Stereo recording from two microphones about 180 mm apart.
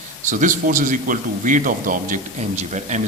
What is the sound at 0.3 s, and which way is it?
A man's voice, 45° right (ahead or behind).